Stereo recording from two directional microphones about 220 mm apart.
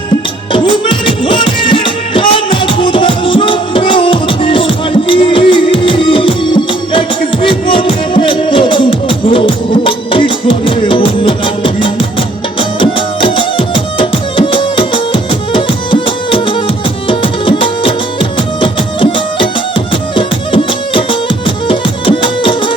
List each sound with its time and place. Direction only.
0.5 s music: 25° left (ahead or behind)